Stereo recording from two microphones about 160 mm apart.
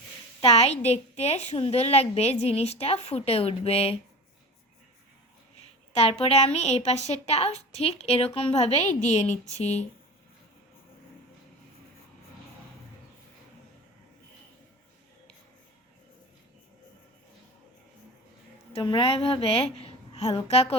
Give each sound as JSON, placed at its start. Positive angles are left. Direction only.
{"t": 0.4, "sound": "a woman's voice", "side_deg": 40}
{"t": 6.1, "sound": "a woman's voice", "side_deg": 40}
{"t": 18.7, "sound": "a woman's voice", "side_deg": 35}